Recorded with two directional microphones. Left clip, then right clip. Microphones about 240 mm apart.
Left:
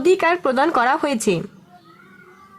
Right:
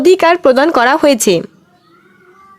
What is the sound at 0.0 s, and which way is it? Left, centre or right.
Speech, right.